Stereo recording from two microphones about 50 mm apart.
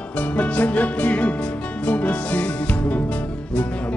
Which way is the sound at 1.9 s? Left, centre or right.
Left.